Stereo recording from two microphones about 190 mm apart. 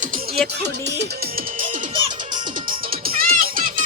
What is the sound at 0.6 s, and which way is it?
Speech, 60° right (ahead or behind).